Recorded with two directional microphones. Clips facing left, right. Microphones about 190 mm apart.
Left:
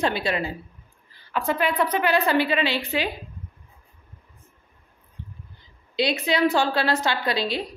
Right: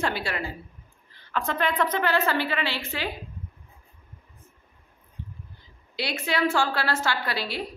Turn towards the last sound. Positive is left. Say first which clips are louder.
# left 5 dB
turn(degrees=20)  # may be behind; listen again after turning